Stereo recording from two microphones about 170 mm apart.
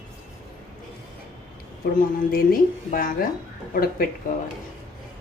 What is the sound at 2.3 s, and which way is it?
A woman's voice, 60° left (ahead or behind).